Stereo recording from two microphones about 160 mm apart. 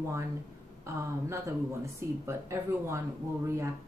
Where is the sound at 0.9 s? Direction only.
20° right (ahead or behind).